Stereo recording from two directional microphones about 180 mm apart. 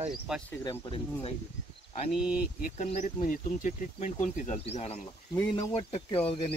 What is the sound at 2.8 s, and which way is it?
Speech, 45° left (ahead or behind).